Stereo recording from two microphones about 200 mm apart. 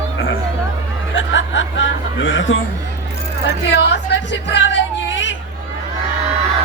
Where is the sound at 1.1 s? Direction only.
70° left (ahead or behind).